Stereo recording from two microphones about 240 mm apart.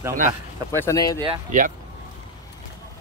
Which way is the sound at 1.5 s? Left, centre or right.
Right.